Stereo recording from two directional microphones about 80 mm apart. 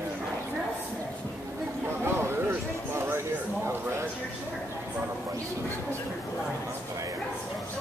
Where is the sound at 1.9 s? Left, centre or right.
Right.